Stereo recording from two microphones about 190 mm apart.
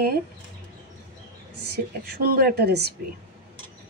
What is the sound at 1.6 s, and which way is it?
Speech, 55° right (ahead or behind).